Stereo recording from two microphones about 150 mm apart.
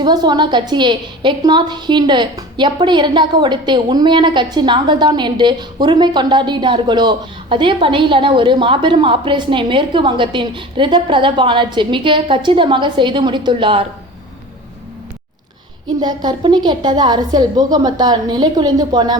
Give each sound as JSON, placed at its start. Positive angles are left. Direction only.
{"t": 0.0, "sound": "a woman's voice", "side_deg": -30}
{"t": 16.0, "sound": "a woman's voice", "side_deg": -30}